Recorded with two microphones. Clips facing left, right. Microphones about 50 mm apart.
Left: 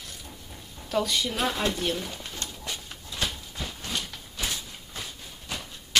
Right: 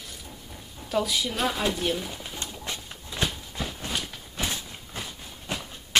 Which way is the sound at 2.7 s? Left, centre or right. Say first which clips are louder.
Right 1 dB; right.